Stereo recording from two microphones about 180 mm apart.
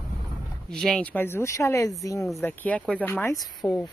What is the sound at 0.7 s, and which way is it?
Speech, 5° left (ahead or behind).